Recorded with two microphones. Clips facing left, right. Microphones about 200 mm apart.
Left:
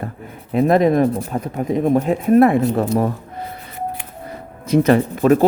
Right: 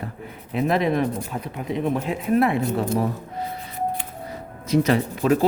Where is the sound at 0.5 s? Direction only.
45° left (ahead or behind).